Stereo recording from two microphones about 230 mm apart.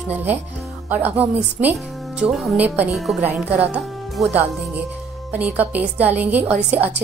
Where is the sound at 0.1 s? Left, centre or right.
Centre.